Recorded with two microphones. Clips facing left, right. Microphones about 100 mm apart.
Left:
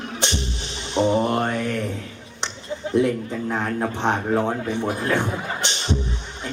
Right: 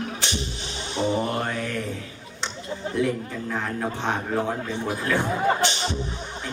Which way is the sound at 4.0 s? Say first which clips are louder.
Left 5 dB; 20° left (ahead or behind).